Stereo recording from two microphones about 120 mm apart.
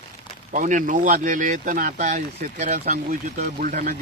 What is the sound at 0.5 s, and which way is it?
Speech, 90° right.